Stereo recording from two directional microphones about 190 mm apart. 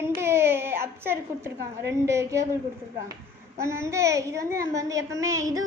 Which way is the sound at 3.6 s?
15° right (ahead or behind).